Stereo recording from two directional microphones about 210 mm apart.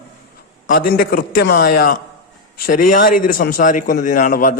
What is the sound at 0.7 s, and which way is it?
A man's voice, 45° left (ahead or behind).